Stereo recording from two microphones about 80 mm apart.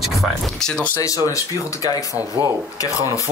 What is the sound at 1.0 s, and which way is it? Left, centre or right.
Speech, left.